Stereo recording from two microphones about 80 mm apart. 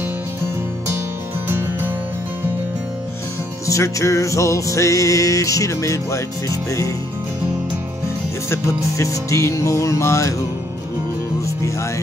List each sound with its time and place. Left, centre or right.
3.6 s music: left
8.5 s music: left